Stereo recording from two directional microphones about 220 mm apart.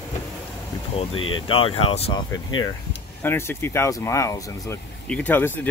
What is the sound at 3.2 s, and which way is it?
Speech, 10° left (ahead or behind).